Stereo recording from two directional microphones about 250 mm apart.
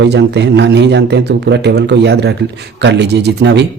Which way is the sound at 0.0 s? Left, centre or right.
Right.